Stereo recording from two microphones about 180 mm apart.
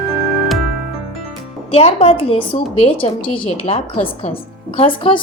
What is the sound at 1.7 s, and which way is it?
A woman's voice, 35° left (ahead or behind).